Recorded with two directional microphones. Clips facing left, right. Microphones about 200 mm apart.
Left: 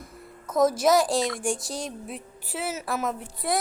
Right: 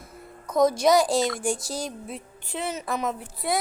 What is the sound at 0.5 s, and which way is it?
A woman's voice, 5° left (ahead or behind).